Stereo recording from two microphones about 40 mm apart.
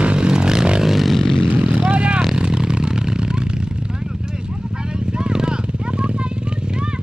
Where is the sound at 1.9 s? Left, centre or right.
Right.